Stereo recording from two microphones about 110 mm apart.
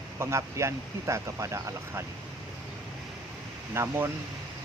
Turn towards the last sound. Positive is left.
turn(degrees=-20)  # may be behind; listen again after turning